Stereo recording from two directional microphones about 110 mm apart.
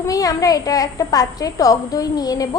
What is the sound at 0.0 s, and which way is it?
A child's voice, 35° left (ahead or behind).